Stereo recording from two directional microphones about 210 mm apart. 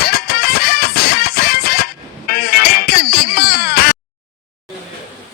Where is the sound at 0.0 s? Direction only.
45° left (ahead or behind).